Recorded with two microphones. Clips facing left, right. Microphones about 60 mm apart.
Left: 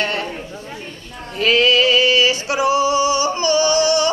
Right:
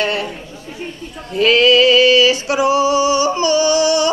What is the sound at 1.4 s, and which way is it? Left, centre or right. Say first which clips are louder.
Male singing: right 4 dB; left.